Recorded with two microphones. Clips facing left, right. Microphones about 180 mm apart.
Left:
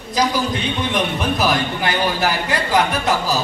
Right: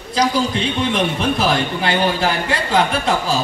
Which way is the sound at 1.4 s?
25° right (ahead or behind).